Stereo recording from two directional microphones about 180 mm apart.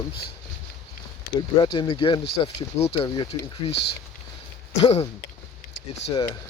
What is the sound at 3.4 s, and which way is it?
Speech, 70° left (ahead or behind).